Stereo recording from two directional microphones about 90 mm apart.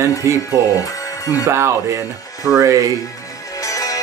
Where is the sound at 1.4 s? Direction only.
30° right (ahead or behind).